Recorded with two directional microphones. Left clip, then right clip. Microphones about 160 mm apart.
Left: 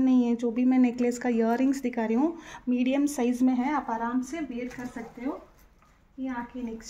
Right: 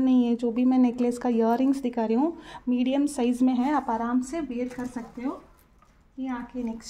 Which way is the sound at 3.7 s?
50° right (ahead or behind).